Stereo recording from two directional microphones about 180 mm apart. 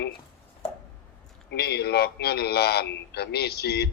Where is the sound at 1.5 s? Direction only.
65° left (ahead or behind).